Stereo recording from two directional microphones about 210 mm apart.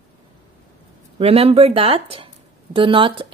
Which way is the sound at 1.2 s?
30° right (ahead or behind).